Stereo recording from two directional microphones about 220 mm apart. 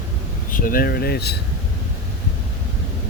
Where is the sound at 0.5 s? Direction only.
40° left (ahead or behind).